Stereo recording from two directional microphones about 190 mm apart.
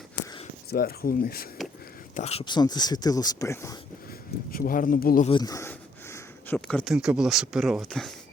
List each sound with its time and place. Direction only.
0.7 s speech: 50° left (ahead or behind)
2.1 s speech: 35° left (ahead or behind)
2.4 s speech: 25° left (ahead or behind)
4.5 s speech: 50° left (ahead or behind)
5.4 s speech: 15° left (ahead or behind)